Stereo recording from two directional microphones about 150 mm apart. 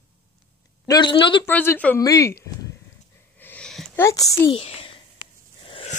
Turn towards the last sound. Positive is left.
turn(degrees=40)  # may be behind; listen again after turning